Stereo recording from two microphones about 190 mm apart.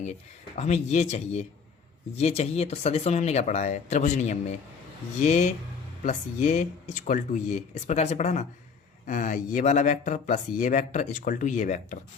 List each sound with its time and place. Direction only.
0.0 s speech: 35° left (ahead or behind)